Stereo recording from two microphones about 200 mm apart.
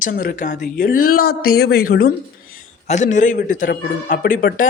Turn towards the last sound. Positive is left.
turn(degrees=40)  # may be behind; listen again after turning